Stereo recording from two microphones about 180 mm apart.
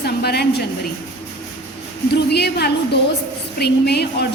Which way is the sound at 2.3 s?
65° left (ahead or behind).